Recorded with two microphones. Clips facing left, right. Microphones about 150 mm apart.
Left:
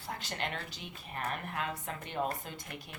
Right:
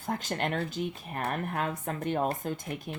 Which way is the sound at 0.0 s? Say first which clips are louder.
Right 7 dB; 45° right (ahead or behind).